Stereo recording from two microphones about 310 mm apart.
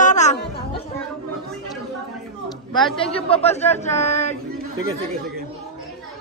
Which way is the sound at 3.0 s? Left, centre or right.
Centre.